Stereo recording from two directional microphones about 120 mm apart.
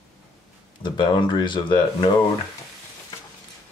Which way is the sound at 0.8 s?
40° left (ahead or behind).